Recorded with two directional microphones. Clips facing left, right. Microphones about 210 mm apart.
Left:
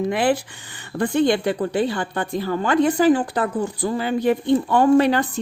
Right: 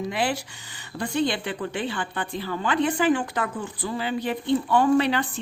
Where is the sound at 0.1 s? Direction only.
50° left (ahead or behind).